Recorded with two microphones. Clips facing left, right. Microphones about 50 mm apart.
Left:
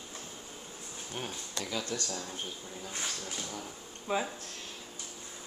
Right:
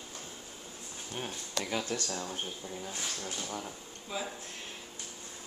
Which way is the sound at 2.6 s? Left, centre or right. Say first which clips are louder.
Right 3 dB; centre.